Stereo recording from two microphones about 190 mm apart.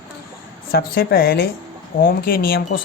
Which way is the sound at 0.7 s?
55° left (ahead or behind).